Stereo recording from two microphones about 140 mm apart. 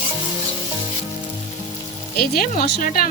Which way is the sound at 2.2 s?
90° left.